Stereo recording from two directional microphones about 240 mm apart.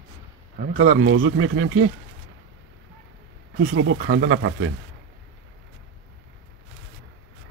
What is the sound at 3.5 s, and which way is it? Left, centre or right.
Speech, right.